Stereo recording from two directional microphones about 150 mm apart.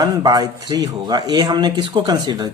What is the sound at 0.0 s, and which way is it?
Speech, 25° right (ahead or behind).